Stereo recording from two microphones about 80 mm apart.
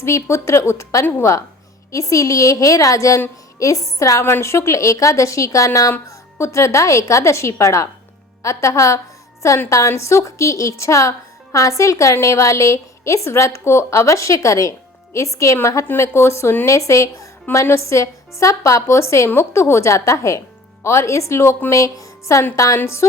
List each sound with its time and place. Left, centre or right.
0.0 s a woman's voice: left
4.2 s a woman's voice: left